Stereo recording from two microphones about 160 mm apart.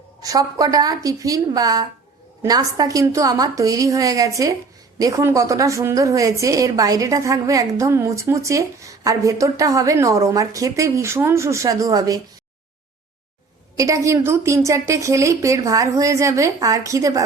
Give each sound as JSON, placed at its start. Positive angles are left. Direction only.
{"t": 0.2, "sound": "a woman's voice", "side_deg": -20}
{"t": 13.7, "sound": "a woman's voice", "side_deg": -20}